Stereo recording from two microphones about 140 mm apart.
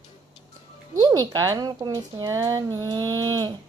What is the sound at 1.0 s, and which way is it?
A woman's voice, 30° right (ahead or behind).